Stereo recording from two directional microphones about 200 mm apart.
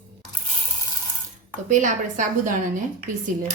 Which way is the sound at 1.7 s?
40° right (ahead or behind).